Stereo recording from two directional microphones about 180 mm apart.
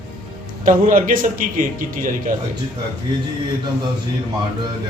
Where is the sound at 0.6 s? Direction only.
45° right (ahead or behind).